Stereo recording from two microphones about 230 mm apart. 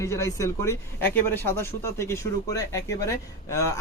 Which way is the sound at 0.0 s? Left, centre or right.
Centre.